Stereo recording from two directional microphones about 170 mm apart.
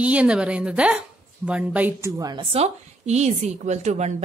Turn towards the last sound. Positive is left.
turn(degrees=-40)  # may be behind; listen again after turning